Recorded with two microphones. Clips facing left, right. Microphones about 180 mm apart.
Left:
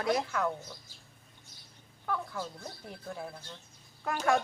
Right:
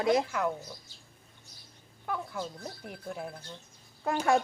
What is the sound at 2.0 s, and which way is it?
Speech, 15° right (ahead or behind).